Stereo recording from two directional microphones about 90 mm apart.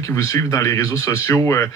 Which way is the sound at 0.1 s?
35° left (ahead or behind).